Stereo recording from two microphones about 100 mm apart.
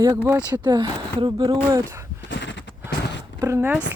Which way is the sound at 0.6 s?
50° right (ahead or behind).